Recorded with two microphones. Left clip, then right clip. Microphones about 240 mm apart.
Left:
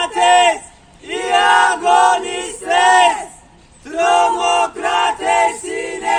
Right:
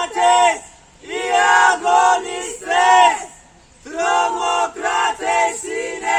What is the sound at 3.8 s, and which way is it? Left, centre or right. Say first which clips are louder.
Male singing: left 4 dB; centre.